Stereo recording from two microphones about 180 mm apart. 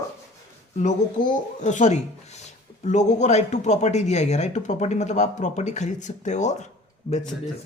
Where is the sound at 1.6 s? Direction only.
40° left (ahead or behind).